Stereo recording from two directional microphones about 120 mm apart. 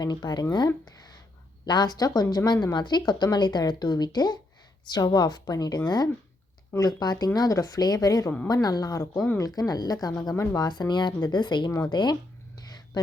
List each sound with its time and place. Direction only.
0.0 s speech: 35° left (ahead or behind)
1.6 s speech: 35° left (ahead or behind)
12.5 s a sound: 35° left (ahead or behind)